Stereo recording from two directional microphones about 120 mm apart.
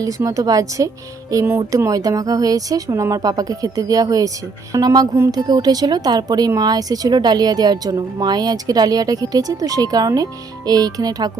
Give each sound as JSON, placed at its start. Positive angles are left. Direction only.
{"t": 0.3, "sound": "speech", "side_deg": -30}